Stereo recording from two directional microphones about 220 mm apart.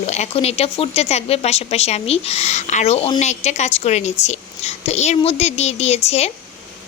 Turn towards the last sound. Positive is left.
turn(degrees=30)  # may be behind; listen again after turning